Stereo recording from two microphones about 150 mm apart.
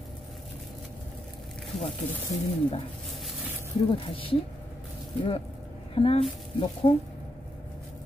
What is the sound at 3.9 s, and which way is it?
Speech, 35° left (ahead or behind).